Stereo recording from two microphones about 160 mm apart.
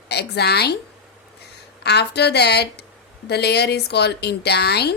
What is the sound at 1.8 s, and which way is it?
A woman's voice, 90° left.